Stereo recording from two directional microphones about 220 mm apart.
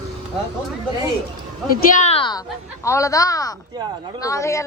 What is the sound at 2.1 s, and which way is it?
A woman's voice, 20° left (ahead or behind).